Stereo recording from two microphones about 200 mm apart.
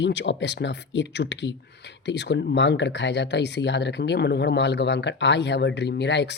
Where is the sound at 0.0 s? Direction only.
60° left (ahead or behind).